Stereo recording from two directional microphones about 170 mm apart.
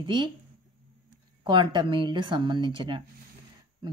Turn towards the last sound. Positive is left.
turn(degrees=-30)  # may be behind; listen again after turning